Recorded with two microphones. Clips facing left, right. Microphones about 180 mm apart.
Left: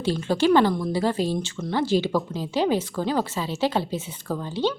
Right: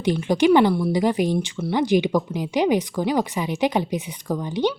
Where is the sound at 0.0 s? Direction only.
15° right (ahead or behind).